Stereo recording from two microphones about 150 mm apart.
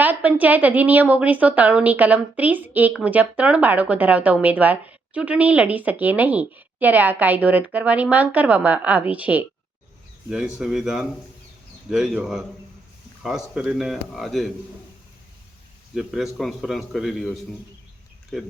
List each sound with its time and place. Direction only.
0.0 s a woman's voice: 10° right (ahead or behind)
16.0 s a man's voice: centre (ahead or behind)